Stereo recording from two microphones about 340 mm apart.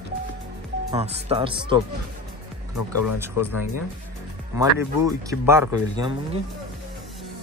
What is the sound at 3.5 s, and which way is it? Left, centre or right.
Speech, left.